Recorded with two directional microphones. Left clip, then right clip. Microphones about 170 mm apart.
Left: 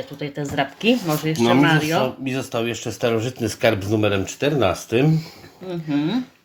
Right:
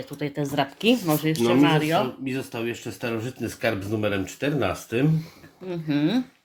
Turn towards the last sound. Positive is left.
turn(degrees=-50)  # may be behind; listen again after turning